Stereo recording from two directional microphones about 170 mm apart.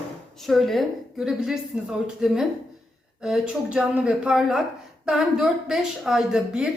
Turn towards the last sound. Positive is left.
turn(degrees=-5)  # may be behind; listen again after turning